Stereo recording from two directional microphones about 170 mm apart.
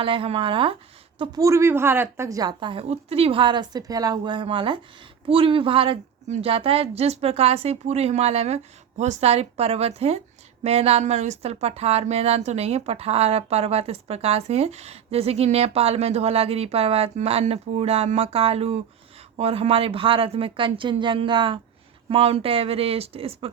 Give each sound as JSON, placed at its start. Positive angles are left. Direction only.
{"t": 0.0, "sound": "a woman's voice", "side_deg": -30}
{"t": 1.2, "sound": "a woman's voice", "side_deg": -20}